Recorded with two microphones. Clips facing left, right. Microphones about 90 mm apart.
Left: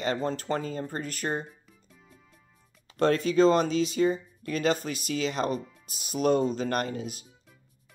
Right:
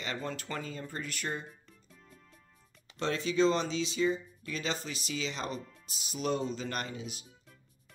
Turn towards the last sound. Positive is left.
turn(degrees=50)  # may be behind; listen again after turning